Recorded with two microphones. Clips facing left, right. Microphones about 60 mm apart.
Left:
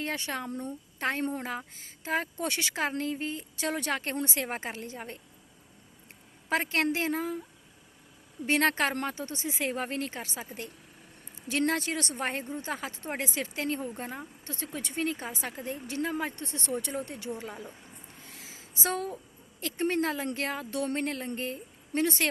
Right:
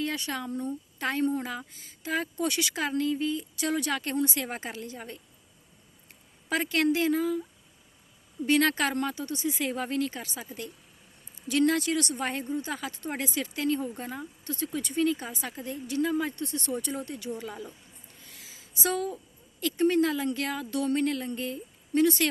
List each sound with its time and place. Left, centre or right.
0.0 s speech: left
6.5 s speech: left
8.4 s speech: left